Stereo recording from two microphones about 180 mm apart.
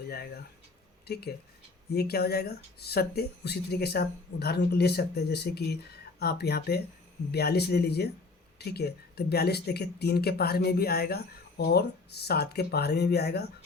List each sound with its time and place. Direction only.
1.0 s speech: 60° left (ahead or behind)